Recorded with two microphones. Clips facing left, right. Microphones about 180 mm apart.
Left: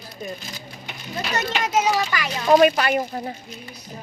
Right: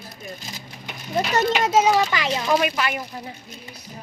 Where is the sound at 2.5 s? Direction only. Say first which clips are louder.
Left 8 dB; 40° left (ahead or behind).